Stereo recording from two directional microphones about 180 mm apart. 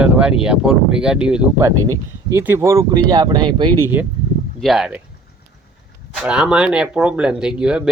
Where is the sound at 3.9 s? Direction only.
10° right (ahead or behind).